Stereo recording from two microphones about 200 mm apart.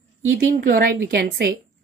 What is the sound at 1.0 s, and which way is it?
Speech, 55° right (ahead or behind).